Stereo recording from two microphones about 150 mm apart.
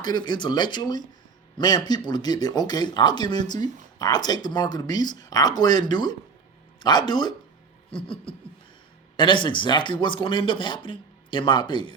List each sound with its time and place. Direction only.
0.0 s speech: 30° left (ahead or behind)